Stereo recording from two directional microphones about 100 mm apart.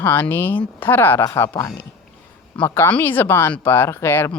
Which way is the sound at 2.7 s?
20° left (ahead or behind).